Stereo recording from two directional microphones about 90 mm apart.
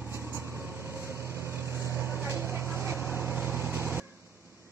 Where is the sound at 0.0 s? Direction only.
30° right (ahead or behind).